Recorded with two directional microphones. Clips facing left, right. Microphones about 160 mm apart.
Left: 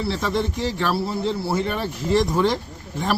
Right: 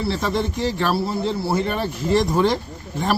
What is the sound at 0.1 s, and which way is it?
Speech, 40° right (ahead or behind).